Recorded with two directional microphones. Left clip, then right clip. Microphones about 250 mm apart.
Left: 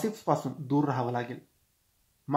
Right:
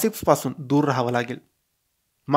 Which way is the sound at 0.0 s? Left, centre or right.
Right.